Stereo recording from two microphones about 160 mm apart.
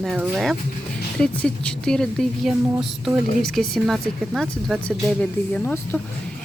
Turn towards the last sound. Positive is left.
turn(degrees=10)  # may be behind; listen again after turning